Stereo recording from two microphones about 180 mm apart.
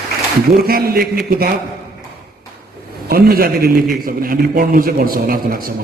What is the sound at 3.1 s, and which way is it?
A man's voice, 55° right (ahead or behind).